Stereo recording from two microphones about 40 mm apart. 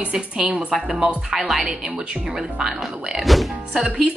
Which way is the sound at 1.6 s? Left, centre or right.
Centre.